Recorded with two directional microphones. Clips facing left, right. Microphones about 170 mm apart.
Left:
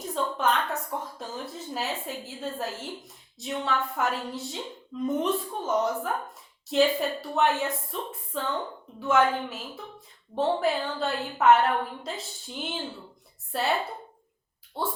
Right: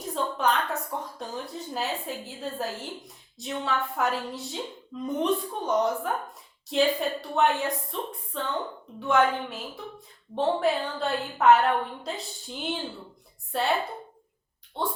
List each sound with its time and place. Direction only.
0.0 s a sound: centre (ahead or behind)
3.3 s speech: centre (ahead or behind)
14.8 s speech: 5° left (ahead or behind)